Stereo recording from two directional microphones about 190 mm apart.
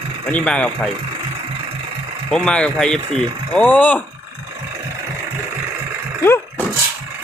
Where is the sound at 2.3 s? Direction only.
5° left (ahead or behind).